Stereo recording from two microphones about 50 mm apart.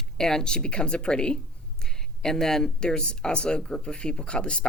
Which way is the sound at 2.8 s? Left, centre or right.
Centre.